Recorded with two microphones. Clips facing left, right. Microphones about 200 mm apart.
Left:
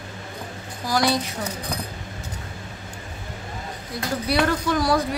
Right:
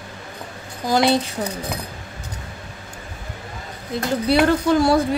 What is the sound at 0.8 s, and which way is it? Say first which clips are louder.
Speech: right 5 dB; 25° right (ahead or behind).